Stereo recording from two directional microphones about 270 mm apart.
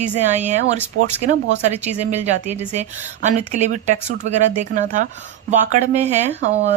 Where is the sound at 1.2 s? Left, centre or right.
Right.